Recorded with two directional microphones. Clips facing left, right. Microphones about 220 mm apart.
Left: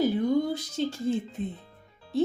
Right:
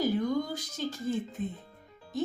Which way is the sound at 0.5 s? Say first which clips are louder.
Left 5 dB; 30° left (ahead or behind).